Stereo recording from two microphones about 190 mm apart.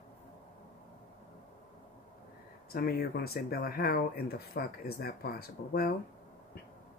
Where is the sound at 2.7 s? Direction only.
55° left (ahead or behind).